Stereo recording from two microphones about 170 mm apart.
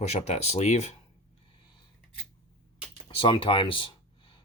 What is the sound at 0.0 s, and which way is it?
Speech, 40° left (ahead or behind).